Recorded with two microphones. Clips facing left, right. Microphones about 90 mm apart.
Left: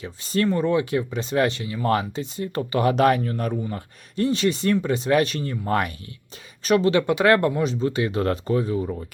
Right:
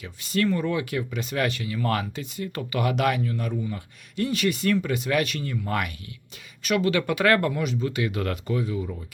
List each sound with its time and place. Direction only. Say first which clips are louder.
0.0 s speech: left 2 dB; 30° left (ahead or behind)